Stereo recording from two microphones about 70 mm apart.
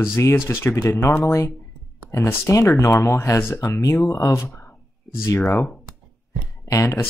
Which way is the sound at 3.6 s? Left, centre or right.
Left.